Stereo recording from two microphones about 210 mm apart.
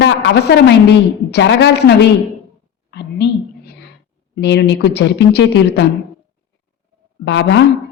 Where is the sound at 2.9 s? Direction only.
55° left (ahead or behind).